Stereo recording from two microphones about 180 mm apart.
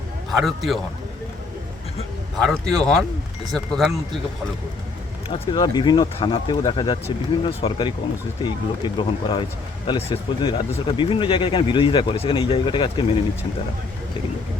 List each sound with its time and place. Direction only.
0.3 s speech: centre (ahead or behind)
2.4 s speech: 5° left (ahead or behind)
5.3 s speech: 25° left (ahead or behind)